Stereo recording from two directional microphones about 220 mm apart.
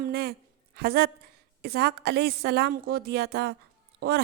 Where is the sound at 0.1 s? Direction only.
45° right (ahead or behind).